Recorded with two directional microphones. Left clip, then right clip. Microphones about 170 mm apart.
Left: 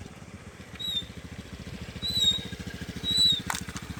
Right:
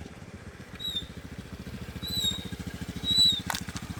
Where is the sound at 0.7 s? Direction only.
60° right (ahead or behind).